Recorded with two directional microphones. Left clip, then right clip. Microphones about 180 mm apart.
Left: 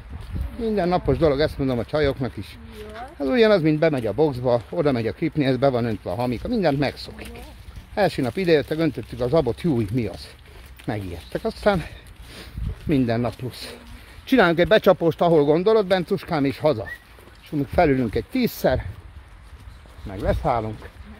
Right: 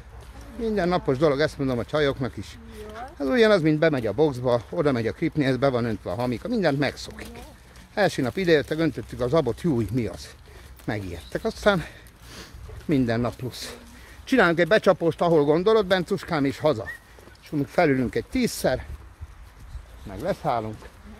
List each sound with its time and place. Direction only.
0.7 s speech: 10° left (ahead or behind)
1.9 s speech: 10° left (ahead or behind)
14.2 s speech: 25° left (ahead or behind)
15.3 s speech: 10° left (ahead or behind)
18.6 s speech: 45° left (ahead or behind)
20.1 s speech: 55° left (ahead or behind)